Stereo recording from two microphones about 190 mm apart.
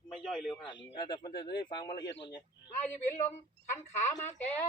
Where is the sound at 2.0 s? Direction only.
70° left (ahead or behind).